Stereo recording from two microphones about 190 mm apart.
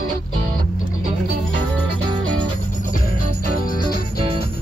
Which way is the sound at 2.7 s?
45° left (ahead or behind).